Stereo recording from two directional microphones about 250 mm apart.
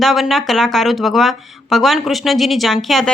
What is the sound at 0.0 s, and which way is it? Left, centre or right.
Speech, centre.